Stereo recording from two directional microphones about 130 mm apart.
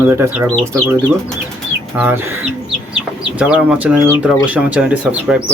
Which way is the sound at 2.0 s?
10° right (ahead or behind).